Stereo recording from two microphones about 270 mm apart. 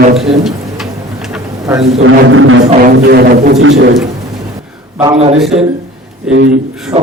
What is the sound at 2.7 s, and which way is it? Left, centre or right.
A man's voice, right.